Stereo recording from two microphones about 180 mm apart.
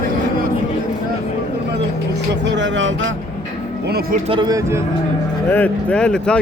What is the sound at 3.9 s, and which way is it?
Speech, 55° right (ahead or behind).